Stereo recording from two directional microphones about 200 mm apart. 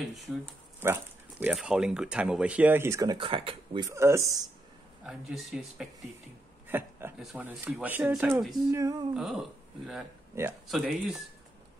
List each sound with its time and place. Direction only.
1.4 s speech: 5° right (ahead or behind)
5.0 s speech: centre (ahead or behind)
8.6 s speech: 15° right (ahead or behind)
9.1 s speech: centre (ahead or behind)
10.3 s speech: 15° right (ahead or behind)
10.7 s speech: 5° right (ahead or behind)